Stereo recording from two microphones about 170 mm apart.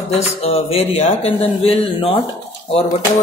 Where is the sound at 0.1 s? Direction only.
35° left (ahead or behind).